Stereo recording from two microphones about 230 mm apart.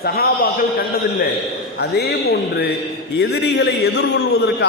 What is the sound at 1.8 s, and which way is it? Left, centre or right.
A man's voice, left.